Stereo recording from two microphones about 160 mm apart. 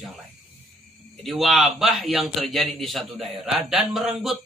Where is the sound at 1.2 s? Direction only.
Centre (ahead or behind).